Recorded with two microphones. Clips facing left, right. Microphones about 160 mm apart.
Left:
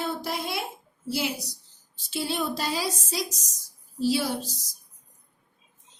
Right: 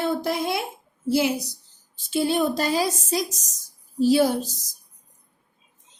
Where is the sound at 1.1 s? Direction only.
50° right (ahead or behind).